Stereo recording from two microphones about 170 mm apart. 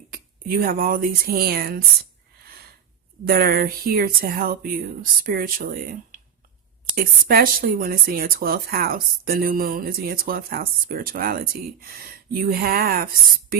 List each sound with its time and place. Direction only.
0.1 s speech: 60° right (ahead or behind)
2.4 s a sound: 65° right (ahead or behind)
3.2 s speech: 65° right (ahead or behind)